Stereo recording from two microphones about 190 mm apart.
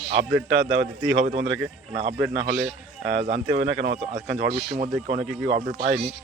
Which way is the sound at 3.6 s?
70° right (ahead or behind).